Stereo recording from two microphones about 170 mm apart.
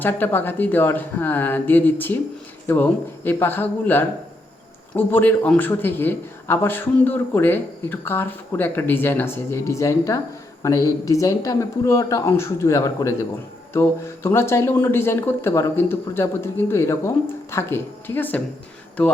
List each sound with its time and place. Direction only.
0.0 s a man's voice: 10° left (ahead or behind)